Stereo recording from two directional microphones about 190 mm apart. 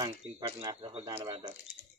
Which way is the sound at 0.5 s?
25° right (ahead or behind).